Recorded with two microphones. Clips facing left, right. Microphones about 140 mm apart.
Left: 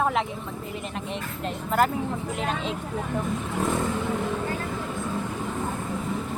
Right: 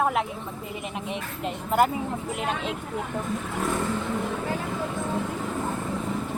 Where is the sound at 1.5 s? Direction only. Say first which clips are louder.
Right 1 dB; 10° right (ahead or behind).